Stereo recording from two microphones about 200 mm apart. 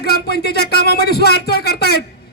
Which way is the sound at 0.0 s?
50° left (ahead or behind).